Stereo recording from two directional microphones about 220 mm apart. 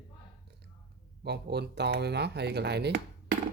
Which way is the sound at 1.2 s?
50° right (ahead or behind).